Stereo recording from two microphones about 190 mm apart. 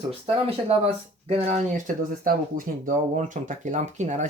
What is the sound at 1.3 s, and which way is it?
Speech, 35° right (ahead or behind).